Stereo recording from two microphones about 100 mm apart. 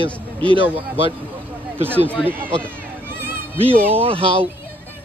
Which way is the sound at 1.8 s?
20° right (ahead or behind).